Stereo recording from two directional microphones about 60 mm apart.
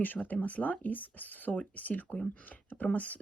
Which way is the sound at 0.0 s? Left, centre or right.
Left.